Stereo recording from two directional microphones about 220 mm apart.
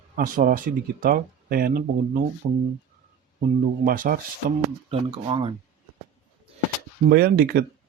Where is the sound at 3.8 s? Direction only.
40° right (ahead or behind).